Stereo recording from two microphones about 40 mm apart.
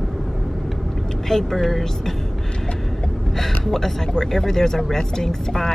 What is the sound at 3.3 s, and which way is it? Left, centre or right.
Speech, centre.